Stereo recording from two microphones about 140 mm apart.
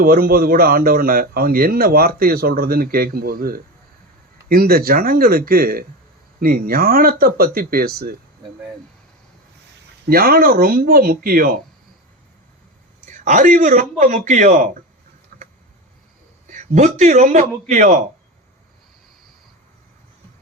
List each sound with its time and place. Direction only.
0.0 s speech: 90° right
10.1 s speech: 90° right
13.1 s a man's voice: 65° right (ahead or behind)
16.5 s a man's voice: 65° right (ahead or behind)